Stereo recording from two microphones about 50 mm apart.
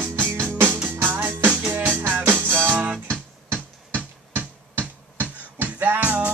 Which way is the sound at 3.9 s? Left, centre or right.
Right.